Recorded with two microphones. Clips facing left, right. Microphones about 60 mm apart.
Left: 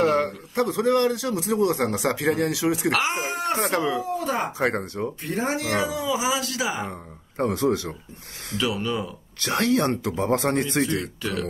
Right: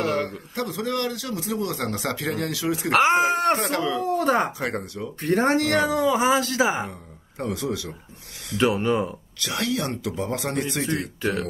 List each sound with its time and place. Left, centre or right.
0.0 s a sound: left
0.6 s a man's voice: left
2.9 s speech: right
3.3 s speech: right
4.6 s speech: left
5.2 s speech: right
7.4 s speech: left
8.5 s speech: right
9.4 s speech: left
10.9 s speech: right